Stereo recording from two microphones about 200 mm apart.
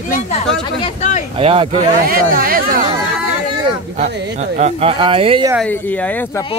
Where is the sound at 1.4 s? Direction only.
30° right (ahead or behind).